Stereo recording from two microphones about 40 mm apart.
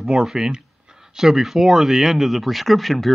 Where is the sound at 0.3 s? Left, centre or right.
Centre.